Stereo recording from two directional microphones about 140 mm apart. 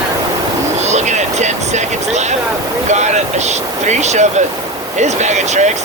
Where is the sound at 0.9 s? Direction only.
55° right (ahead or behind).